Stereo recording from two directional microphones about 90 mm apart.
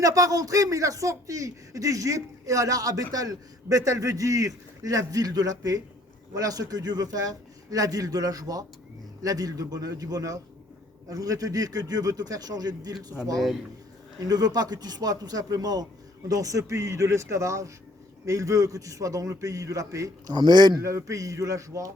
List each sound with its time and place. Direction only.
0.0 s a man's voice: 40° right (ahead or behind)
14.2 s a man's voice: 45° right (ahead or behind)
20.3 s a man's voice: 55° right (ahead or behind)
20.8 s speech: 35° right (ahead or behind)